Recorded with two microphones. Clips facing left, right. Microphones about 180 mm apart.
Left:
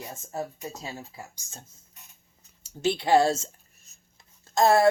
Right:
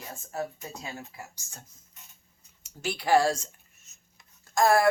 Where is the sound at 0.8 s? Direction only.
20° left (ahead or behind).